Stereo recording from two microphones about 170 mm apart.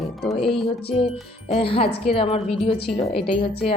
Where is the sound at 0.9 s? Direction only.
5° right (ahead or behind).